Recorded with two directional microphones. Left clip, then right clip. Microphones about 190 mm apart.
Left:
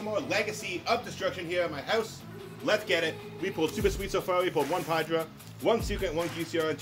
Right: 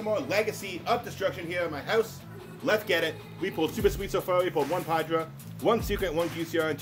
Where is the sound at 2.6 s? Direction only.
25° right (ahead or behind).